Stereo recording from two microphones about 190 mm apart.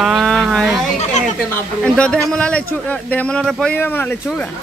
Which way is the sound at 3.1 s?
5° left (ahead or behind).